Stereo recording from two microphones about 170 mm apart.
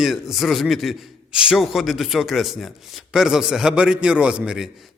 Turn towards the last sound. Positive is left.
turn(degrees=-5)  # may be behind; listen again after turning